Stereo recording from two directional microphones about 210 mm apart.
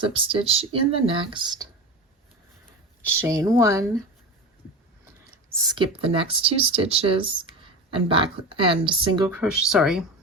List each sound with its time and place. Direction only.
0.0 s speech: 25° right (ahead or behind)
3.0 s speech: 10° right (ahead or behind)
5.3 s speech: 15° right (ahead or behind)
9.3 s speech: 5° right (ahead or behind)